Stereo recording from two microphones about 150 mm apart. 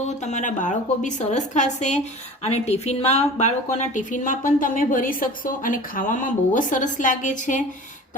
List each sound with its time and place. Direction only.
0.2 s a woman's voice: 55° left (ahead or behind)